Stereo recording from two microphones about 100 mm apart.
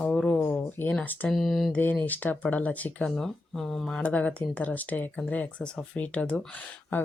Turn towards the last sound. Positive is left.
turn(degrees=15)  # may be behind; listen again after turning